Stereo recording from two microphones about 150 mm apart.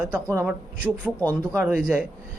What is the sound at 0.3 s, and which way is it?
Speech, 15° right (ahead or behind).